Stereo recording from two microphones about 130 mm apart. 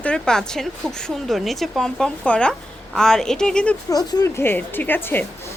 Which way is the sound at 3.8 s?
30° left (ahead or behind).